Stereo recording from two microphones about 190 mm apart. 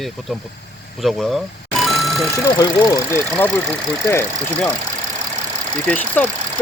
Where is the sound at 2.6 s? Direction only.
20° left (ahead or behind).